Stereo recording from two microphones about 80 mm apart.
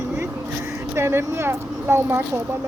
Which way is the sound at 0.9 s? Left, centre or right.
Right.